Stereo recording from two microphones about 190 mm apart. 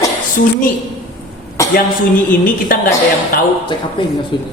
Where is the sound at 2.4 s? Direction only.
45° left (ahead or behind).